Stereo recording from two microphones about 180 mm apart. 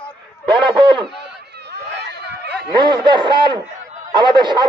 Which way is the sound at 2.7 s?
25° right (ahead or behind).